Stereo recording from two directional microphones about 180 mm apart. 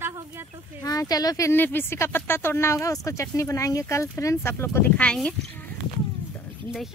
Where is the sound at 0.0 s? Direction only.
15° right (ahead or behind).